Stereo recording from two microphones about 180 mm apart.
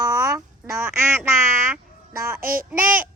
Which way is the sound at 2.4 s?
55° right (ahead or behind).